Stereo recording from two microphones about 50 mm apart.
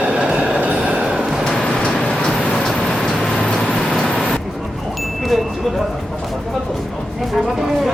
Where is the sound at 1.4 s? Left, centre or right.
Centre.